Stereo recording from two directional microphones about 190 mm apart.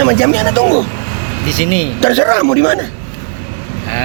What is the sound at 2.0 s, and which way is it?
Speech, 25° right (ahead or behind).